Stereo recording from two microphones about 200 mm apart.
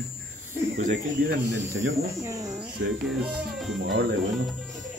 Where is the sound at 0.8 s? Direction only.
40° right (ahead or behind).